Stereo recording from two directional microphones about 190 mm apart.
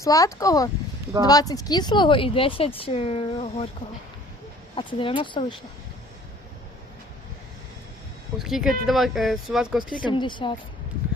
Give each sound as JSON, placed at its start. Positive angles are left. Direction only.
{"t": 0.0, "sound": "speech", "side_deg": 15}
{"t": 4.7, "sound": "speech", "side_deg": 25}
{"t": 8.4, "sound": "speech", "side_deg": 0}
{"t": 10.1, "sound": "speech", "side_deg": 25}